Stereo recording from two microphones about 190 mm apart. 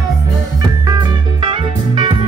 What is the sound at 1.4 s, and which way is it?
Music, 25° right (ahead or behind).